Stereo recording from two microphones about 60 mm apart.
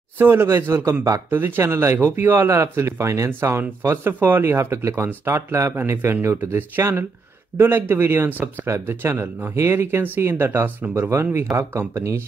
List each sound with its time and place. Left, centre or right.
0.2 s speech: right
1.6 s speech: right
2.0 s speech: right
2.5 s speech: right
5.8 s speech: right
6.8 s speech: right
8.3 s speech: right
8.6 s speech: right
11.0 s speech: right